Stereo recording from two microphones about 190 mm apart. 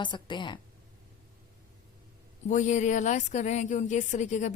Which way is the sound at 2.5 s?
40° left (ahead or behind).